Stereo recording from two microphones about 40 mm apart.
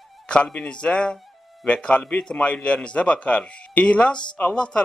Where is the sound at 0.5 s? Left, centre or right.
Left.